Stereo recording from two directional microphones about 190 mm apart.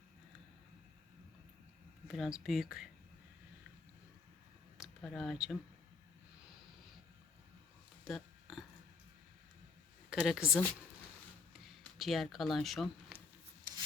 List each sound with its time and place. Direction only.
2.0 s speech: centre (ahead or behind)
4.8 s speech: centre (ahead or behind)
8.0 s a sound: centre (ahead or behind)
10.1 s speech: 5° right (ahead or behind)
11.6 s speech: centre (ahead or behind)
13.7 s rub: 20° right (ahead or behind)